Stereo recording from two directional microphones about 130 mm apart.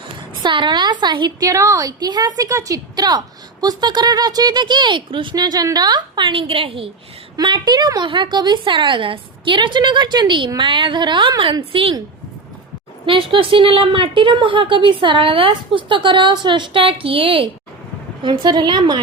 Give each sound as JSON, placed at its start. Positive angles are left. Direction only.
{"t": 0.4, "sound": "a woman's voice", "side_deg": -35}
{"t": 7.3, "sound": "a woman's voice", "side_deg": -35}
{"t": 13.1, "sound": "a woman's voice", "side_deg": -45}